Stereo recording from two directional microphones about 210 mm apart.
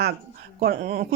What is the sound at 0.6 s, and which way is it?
Speech, 45° right (ahead or behind).